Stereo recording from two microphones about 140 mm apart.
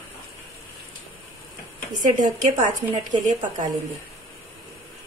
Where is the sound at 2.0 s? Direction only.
65° right (ahead or behind).